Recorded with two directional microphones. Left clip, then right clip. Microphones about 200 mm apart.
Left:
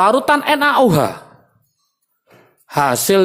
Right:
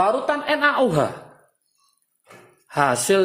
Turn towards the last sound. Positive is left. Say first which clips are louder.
# left 4 dB
turn(degrees=20)  # may be behind; listen again after turning